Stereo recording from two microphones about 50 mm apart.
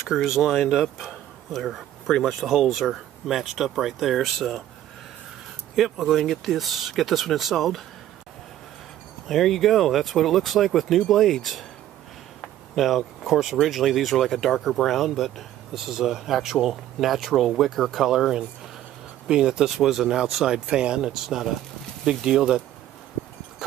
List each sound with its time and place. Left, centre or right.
0.0 s speech: centre
5.8 s speech: centre
9.3 s speech: centre
19.6 s speech: centre